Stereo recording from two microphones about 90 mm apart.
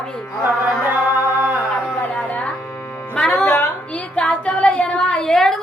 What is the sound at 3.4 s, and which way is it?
Speech, 25° left (ahead or behind).